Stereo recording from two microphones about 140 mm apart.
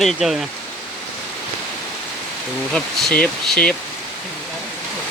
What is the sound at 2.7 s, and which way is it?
Speech, 5° left (ahead or behind).